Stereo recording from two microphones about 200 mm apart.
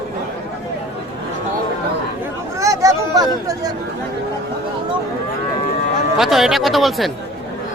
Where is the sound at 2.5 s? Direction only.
15° right (ahead or behind).